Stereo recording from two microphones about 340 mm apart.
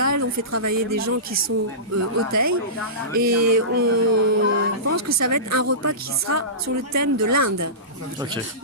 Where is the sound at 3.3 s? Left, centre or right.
Right.